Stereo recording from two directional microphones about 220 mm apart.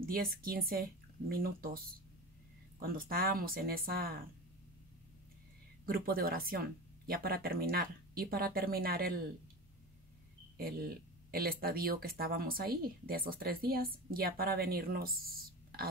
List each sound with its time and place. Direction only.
0.0 s speech: 40° right (ahead or behind)
2.8 s speech: 40° right (ahead or behind)
5.9 s speech: 40° right (ahead or behind)
10.6 s speech: 45° right (ahead or behind)